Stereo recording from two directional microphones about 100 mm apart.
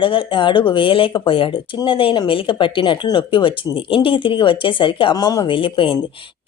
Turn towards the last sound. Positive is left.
turn(degrees=60)  # may be behind; listen again after turning